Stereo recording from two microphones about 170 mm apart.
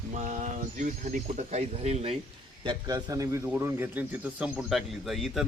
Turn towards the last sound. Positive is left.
turn(degrees=0)  # may be behind; listen again after turning